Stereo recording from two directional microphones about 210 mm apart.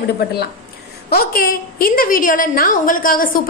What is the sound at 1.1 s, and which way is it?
A woman's voice, 45° left (ahead or behind).